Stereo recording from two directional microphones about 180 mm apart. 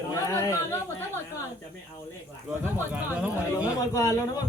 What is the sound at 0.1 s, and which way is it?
Speech, 15° left (ahead or behind).